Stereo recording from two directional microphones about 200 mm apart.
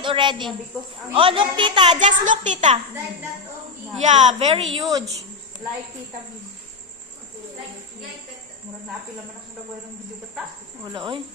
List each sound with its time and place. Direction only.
0.0 s a woman's voice: 25° right (ahead or behind)
2.0 s a woman's voice: 40° right (ahead or behind)
3.9 s a woman's voice: 35° right (ahead or behind)
4.7 s a woman's voice: 20° right (ahead or behind)
10.9 s a woman's voice: 25° right (ahead or behind)